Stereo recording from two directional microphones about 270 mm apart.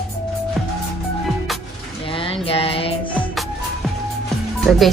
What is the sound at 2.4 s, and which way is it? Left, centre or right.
Music, left.